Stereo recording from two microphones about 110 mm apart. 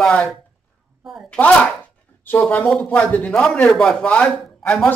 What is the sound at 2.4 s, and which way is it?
Speech, 10° left (ahead or behind).